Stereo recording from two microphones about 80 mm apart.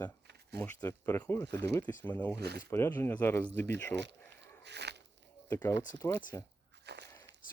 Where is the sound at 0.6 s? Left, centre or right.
Left.